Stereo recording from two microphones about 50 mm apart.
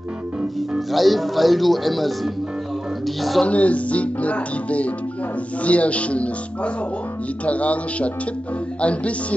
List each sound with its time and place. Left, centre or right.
0.6 s speech: centre
3.4 s music: left